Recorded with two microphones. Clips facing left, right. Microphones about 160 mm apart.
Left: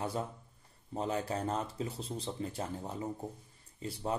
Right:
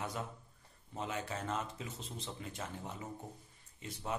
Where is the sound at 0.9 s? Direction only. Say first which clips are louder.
Left 6 dB; 35° left (ahead or behind).